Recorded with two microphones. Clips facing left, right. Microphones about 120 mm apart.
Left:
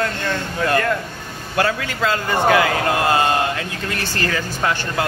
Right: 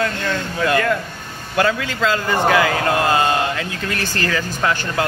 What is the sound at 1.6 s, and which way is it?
A man's voice, 30° left (ahead or behind).